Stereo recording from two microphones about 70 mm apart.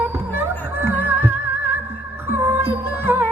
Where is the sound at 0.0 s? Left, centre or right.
Right.